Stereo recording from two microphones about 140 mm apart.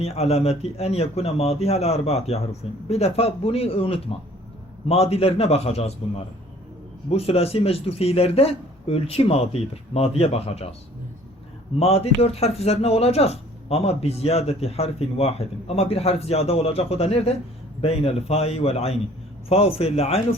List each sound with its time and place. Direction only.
0.0 s a man's voice: 50° left (ahead or behind)
11.8 s a man's voice: 45° left (ahead or behind)